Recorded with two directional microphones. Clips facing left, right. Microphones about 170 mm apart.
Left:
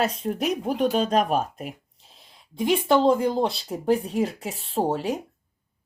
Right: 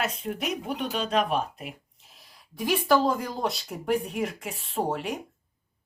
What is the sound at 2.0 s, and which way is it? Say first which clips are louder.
Speech: left 3 dB; 25° left (ahead or behind).